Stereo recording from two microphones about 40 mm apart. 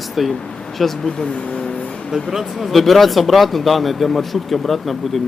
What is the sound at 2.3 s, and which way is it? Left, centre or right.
Speech, centre.